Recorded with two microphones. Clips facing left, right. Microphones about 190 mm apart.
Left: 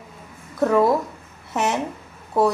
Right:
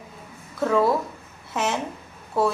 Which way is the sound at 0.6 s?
15° left (ahead or behind).